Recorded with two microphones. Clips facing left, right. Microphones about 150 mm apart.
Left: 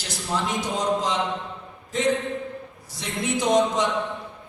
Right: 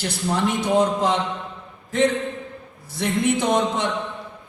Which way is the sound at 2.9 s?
55° right (ahead or behind).